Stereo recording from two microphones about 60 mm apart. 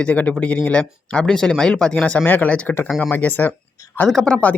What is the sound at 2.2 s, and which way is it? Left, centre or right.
Speech, left.